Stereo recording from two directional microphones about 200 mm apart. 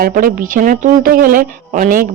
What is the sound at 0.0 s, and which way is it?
A woman's voice, 45° right (ahead or behind).